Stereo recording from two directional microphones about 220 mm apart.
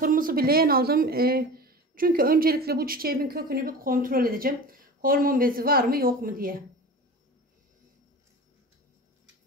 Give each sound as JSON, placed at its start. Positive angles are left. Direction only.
{"t": 0.0, "sound": "speech", "side_deg": -40}